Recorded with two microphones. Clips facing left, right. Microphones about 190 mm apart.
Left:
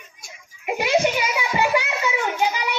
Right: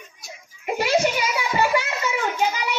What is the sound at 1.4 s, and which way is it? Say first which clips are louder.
Music: even; 15° left (ahead or behind).